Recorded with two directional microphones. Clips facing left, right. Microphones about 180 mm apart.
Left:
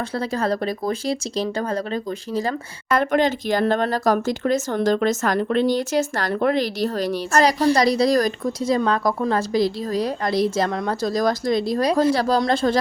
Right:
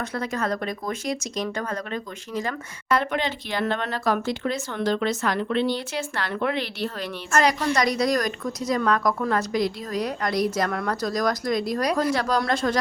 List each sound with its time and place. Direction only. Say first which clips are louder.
0.1 s speech: left 4 dB; 30° left (ahead or behind)
2.9 s speech: left 5 dB; 45° left (ahead or behind); by 12.8 s 30° left (ahead or behind)